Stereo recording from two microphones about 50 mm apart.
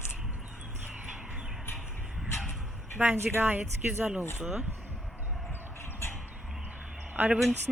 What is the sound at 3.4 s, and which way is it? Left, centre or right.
Speech, right.